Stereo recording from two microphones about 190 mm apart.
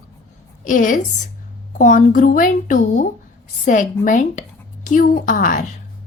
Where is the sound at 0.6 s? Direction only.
45° left (ahead or behind).